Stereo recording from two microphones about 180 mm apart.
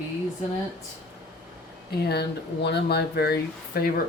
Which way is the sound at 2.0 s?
65° left (ahead or behind).